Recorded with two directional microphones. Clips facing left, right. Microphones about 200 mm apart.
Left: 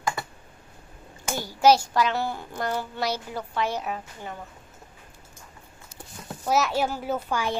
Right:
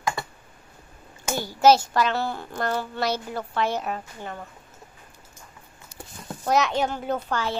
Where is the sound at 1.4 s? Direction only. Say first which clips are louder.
Right 1 dB; 10° left (ahead or behind).